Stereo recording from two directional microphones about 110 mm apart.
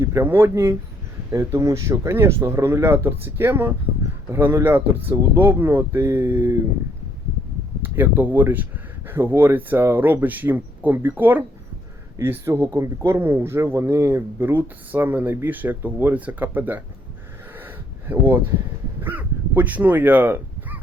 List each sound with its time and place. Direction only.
0.0 s speech: 25° right (ahead or behind)
7.8 s speech: 20° right (ahead or behind)
17.5 s gasp: 20° right (ahead or behind)
19.0 s speech: 15° right (ahead or behind)